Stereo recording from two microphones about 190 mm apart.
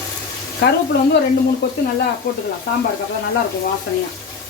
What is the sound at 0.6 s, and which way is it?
Speech, 65° left (ahead or behind).